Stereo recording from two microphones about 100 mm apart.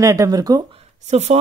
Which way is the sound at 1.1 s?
90° right.